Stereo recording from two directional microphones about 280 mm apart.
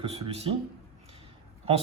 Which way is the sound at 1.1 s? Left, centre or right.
Right.